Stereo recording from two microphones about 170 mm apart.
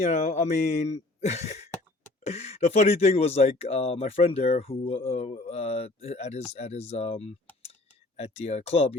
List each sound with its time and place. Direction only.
0.0 s speech: 40° left (ahead or behind)